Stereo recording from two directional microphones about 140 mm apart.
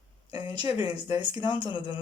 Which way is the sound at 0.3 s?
30° right (ahead or behind).